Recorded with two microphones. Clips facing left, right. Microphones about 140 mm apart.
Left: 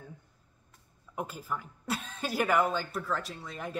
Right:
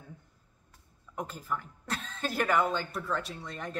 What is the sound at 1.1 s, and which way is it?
Speech, 10° left (ahead or behind).